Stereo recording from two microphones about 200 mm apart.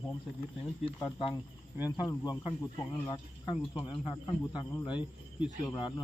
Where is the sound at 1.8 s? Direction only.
20° left (ahead or behind).